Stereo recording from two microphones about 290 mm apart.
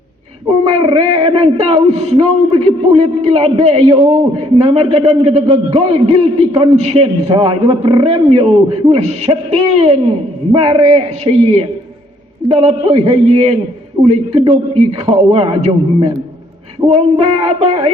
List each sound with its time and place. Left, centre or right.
0.6 s a man's voice: centre